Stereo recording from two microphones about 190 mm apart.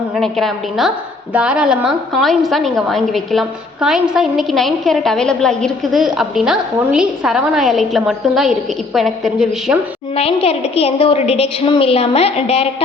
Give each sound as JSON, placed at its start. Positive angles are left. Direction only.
{"t": 0.2, "sound": "a woman's voice", "side_deg": 0}
{"t": 10.2, "sound": "a woman's voice", "side_deg": 30}